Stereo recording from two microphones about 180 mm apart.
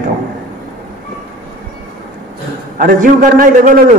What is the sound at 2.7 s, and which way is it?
Speech, 50° right (ahead or behind).